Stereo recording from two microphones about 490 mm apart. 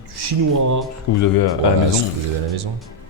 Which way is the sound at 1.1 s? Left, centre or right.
Left.